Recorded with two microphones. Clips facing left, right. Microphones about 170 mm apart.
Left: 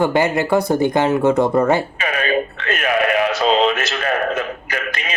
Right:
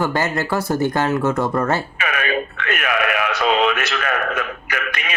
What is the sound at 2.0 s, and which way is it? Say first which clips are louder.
Speech: left 3 dB; 30° left (ahead or behind).